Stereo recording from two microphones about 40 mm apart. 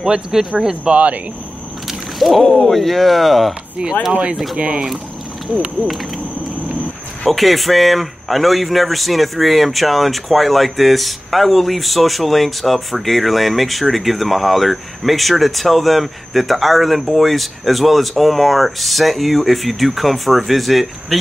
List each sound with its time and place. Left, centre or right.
0.0 s speech: centre
0.9 s speech: right
1.9 s a sound: centre
2.7 s speech: centre
4.1 s speech: right
7.2 s speech: centre